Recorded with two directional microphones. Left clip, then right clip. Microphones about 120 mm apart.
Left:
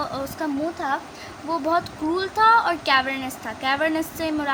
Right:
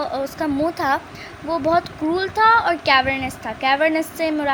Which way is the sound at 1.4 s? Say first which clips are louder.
Right 4 dB; 30° right (ahead or behind).